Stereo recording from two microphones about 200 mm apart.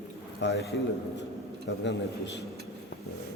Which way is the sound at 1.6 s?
60° left (ahead or behind).